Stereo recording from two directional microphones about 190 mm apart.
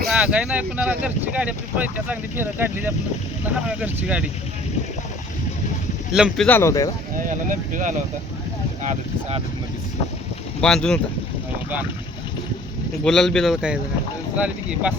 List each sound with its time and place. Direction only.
0.1 s speech: 5° right (ahead or behind)
6.1 s speech: centre (ahead or behind)
6.6 s speech: 15° left (ahead or behind)
7.3 s speech: 45° right (ahead or behind)
10.6 s speech: 5° left (ahead or behind)
13.1 s speech: 5° left (ahead or behind)